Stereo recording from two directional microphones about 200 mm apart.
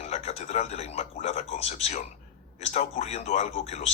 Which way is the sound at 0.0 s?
35° left (ahead or behind).